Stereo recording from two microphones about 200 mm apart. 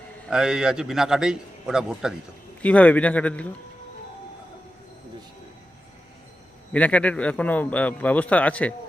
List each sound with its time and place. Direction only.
0.3 s a man's voice: 5° right (ahead or behind)
6.7 s a man's voice: 5° left (ahead or behind)